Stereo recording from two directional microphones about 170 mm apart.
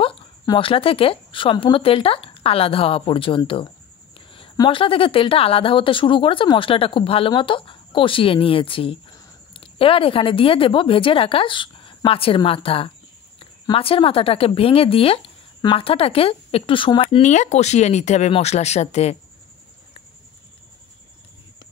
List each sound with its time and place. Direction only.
0.0 s a woman's voice: 30° left (ahead or behind)